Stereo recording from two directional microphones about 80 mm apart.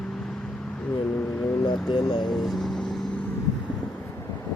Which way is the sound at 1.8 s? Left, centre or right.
Left.